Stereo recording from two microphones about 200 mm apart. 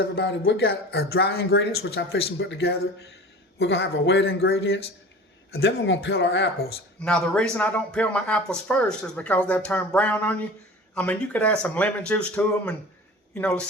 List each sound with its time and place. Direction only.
0.0 s speech: 55° left (ahead or behind)
7.0 s speech: 5° left (ahead or behind)